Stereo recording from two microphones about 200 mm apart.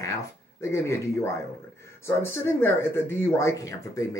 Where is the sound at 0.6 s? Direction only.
15° left (ahead or behind).